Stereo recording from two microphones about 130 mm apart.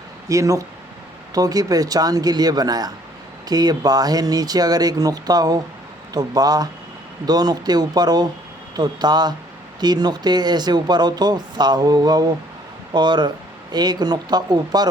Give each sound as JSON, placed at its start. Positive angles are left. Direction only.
{"t": 0.3, "sound": "speech", "side_deg": -25}